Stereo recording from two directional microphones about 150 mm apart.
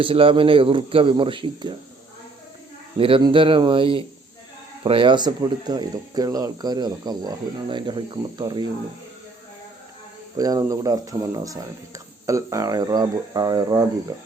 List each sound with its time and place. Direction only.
0.0 s a man's voice: 35° right (ahead or behind)
3.0 s a man's voice: 35° right (ahead or behind)
10.3 s speech: 25° right (ahead or behind)